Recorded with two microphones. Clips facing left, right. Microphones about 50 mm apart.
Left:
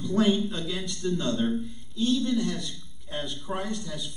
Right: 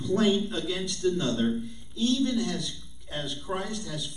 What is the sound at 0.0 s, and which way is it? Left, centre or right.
A man's voice, centre.